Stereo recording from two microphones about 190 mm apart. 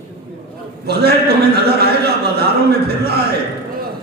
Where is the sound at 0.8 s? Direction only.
55° right (ahead or behind).